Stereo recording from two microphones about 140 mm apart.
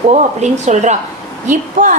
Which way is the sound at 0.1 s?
55° right (ahead or behind).